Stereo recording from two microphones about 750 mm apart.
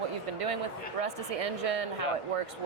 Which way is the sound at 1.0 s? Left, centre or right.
Right.